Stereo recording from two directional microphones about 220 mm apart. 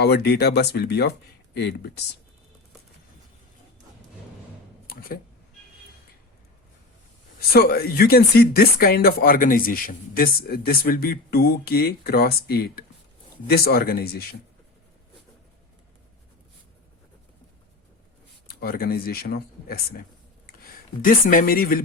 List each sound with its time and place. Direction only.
0.0 s speech: 45° left (ahead or behind)
4.9 s speech: 40° left (ahead or behind)
7.3 s speech: 45° left (ahead or behind)
18.4 s speech: 45° left (ahead or behind)
21.0 s speech: 40° left (ahead or behind)